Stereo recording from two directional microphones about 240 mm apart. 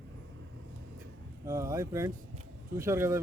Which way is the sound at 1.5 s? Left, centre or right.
Centre.